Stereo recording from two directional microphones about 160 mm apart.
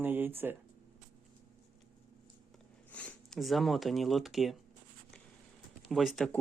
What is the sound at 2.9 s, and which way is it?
Speech, 10° left (ahead or behind).